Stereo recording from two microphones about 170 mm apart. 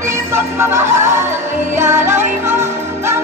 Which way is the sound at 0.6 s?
15° right (ahead or behind).